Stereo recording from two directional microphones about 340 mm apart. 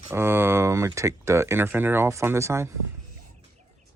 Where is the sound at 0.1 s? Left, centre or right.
Centre.